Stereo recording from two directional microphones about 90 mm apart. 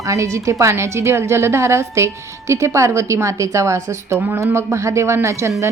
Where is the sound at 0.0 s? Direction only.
35° right (ahead or behind).